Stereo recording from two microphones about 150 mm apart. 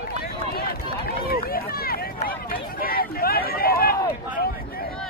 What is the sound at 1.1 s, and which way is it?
Run, 90° left.